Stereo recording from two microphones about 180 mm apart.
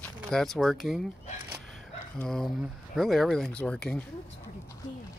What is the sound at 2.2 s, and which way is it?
Speech, centre (ahead or behind).